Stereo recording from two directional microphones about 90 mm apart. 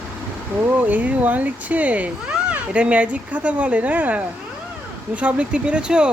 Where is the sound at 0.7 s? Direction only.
20° right (ahead or behind).